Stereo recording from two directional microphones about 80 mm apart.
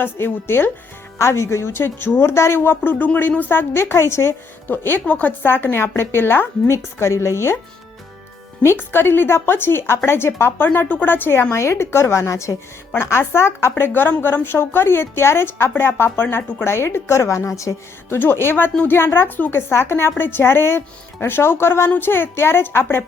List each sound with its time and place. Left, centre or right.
0.0 s a woman's voice: left
8.6 s speech: left
10.7 s a woman's voice: centre; by 17.7 s left
18.1 s speech: left